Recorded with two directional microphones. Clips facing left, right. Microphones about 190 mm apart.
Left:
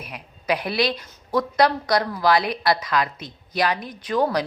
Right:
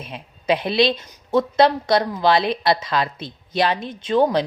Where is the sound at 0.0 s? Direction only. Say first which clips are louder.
Right 4 dB; 25° right (ahead or behind).